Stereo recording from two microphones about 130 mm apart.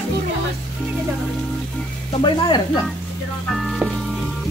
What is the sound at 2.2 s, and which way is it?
Speech, 35° left (ahead or behind).